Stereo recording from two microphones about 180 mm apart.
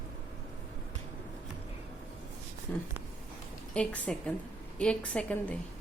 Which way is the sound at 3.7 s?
5° left (ahead or behind).